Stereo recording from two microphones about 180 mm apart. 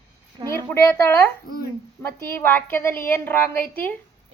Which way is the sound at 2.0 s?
10° left (ahead or behind).